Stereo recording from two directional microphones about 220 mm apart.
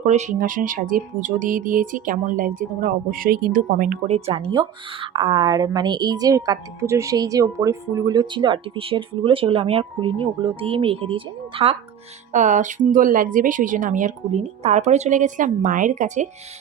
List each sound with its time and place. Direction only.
0.0 s a woman's voice: 30° right (ahead or behind)